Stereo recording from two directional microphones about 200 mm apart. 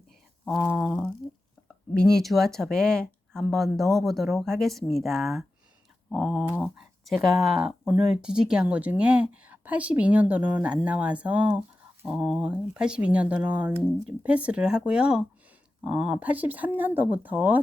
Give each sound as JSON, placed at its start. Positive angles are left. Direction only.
{"t": 0.6, "sound": "speech", "side_deg": 0}